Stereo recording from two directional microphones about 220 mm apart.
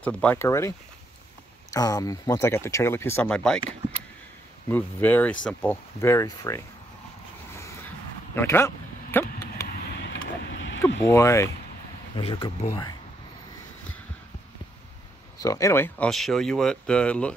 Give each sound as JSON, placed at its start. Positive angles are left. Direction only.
{"t": 0.0, "sound": "speech", "side_deg": 5}
{"t": 4.6, "sound": "speech", "side_deg": 10}
{"t": 7.5, "sound": "vehicle", "side_deg": 10}
{"t": 8.4, "sound": "a sound", "side_deg": 10}
{"t": 10.0, "sound": "vehicle", "side_deg": 55}
{"t": 11.1, "sound": "speech", "side_deg": 15}
{"t": 15.4, "sound": "speech", "side_deg": 15}